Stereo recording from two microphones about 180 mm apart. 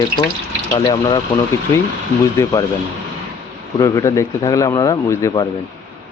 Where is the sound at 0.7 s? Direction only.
20° left (ahead or behind).